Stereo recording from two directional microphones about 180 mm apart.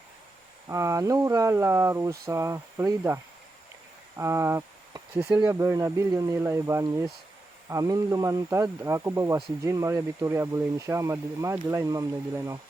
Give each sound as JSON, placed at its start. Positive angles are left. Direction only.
{"t": 0.7, "sound": "speech", "side_deg": -15}
{"t": 4.2, "sound": "speech", "side_deg": -15}